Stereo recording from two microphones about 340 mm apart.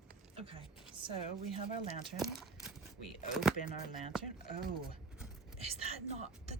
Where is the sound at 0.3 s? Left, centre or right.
Centre.